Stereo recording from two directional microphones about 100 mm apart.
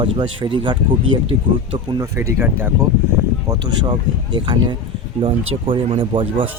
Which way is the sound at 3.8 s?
50° right (ahead or behind).